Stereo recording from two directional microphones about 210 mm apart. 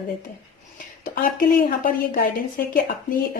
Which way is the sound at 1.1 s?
40° left (ahead or behind).